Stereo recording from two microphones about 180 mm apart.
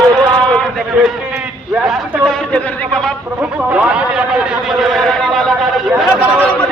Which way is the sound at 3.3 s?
5° right (ahead or behind).